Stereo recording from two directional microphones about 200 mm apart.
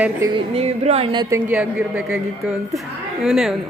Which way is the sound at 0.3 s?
30° right (ahead or behind).